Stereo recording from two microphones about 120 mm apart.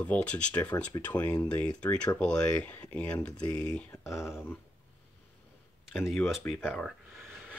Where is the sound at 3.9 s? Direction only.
25° left (ahead or behind).